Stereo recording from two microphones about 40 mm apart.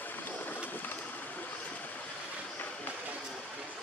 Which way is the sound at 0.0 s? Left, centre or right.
Left.